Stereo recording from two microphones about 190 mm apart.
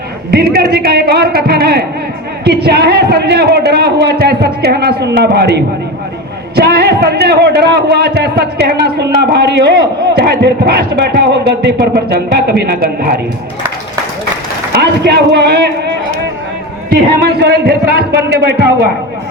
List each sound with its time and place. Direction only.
0.3 s a man's voice: 55° right (ahead or behind)
14.7 s a man's voice: 60° right (ahead or behind)
16.9 s a man's voice: 60° right (ahead or behind)